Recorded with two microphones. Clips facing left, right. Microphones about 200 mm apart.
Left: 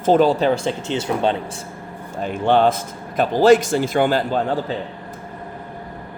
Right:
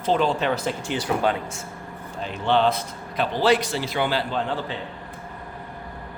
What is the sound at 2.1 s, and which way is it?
A man's voice, 50° left (ahead or behind).